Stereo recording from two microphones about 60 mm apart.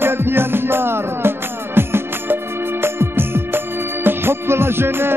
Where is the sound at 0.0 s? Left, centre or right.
Right.